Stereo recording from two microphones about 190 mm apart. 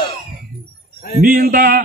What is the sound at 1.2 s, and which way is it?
Speech, 45° right (ahead or behind).